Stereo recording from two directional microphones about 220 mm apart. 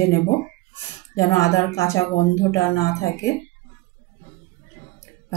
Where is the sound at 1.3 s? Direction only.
15° left (ahead or behind).